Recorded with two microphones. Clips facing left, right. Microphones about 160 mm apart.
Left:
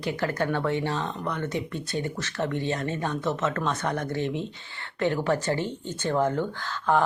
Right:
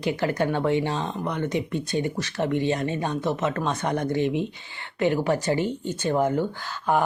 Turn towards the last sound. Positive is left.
turn(degrees=-10)  # may be behind; listen again after turning